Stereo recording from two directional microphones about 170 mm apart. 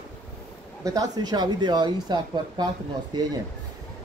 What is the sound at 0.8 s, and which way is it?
Speech, 20° right (ahead or behind).